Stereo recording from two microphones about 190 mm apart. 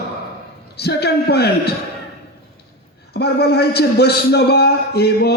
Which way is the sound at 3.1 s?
60° left (ahead or behind).